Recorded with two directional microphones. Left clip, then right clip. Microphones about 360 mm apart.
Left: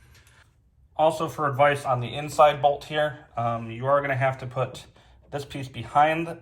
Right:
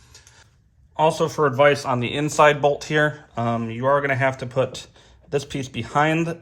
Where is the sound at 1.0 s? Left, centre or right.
Right.